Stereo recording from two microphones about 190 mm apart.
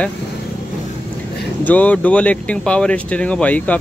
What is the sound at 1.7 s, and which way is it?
Speech, 10° left (ahead or behind).